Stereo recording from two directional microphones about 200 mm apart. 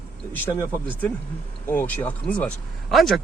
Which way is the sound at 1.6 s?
10° left (ahead or behind).